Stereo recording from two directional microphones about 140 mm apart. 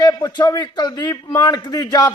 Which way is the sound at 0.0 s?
25° left (ahead or behind).